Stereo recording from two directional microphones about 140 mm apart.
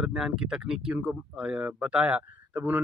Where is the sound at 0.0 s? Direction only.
5° right (ahead or behind).